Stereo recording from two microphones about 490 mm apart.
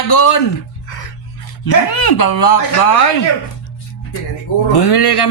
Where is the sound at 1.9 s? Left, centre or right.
Left.